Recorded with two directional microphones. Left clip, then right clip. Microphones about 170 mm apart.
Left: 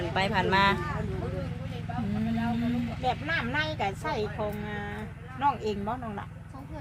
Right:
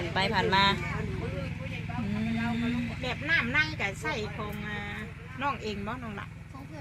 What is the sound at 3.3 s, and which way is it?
Speech, 90° left.